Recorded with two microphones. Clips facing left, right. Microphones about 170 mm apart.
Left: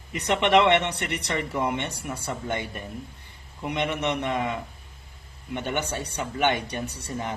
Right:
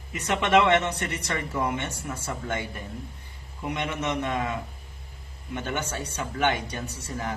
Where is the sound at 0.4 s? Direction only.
20° left (ahead or behind).